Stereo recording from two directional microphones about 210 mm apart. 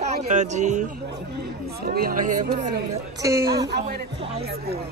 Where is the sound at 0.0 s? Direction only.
35° right (ahead or behind).